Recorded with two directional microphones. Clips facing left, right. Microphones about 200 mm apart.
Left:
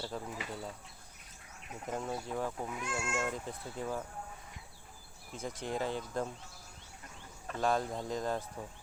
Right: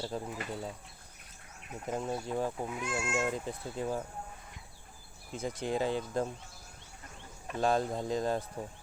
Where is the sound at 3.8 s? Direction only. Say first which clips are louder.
Right 3 dB; 25° right (ahead or behind).